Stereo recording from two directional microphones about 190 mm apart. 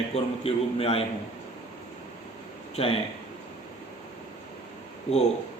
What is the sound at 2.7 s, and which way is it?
Speech, 30° left (ahead or behind).